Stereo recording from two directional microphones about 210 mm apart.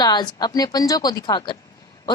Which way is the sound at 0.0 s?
20° left (ahead or behind).